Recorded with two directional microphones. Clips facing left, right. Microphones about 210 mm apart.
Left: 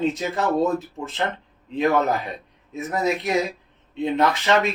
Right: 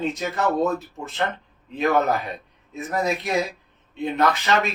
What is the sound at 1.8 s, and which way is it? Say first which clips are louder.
Speech: even; 25° left (ahead or behind).